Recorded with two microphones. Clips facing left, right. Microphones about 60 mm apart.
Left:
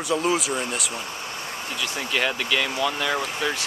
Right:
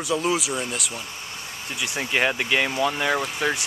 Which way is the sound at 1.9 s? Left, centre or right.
Centre.